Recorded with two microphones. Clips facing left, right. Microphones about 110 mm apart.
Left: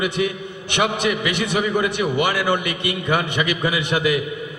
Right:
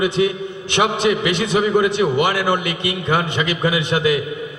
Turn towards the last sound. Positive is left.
turn(degrees=-20)  # may be behind; listen again after turning